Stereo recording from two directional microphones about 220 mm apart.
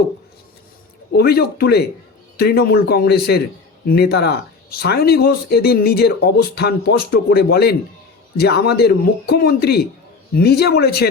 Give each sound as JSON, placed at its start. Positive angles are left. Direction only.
{"t": 1.1, "sound": "speech", "side_deg": 45}